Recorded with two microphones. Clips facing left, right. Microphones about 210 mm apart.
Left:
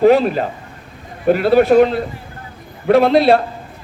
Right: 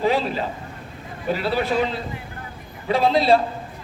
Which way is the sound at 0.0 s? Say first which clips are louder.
Left 10 dB; 55° left (ahead or behind).